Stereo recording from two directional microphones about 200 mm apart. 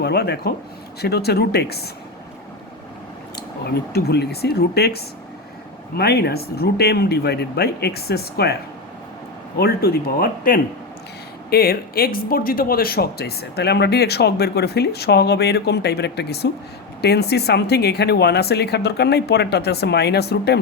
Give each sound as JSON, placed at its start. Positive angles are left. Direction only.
{"t": 0.0, "sound": "speech", "side_deg": 55}
{"t": 3.8, "sound": "speech", "side_deg": 55}
{"t": 9.6, "sound": "speech", "side_deg": 50}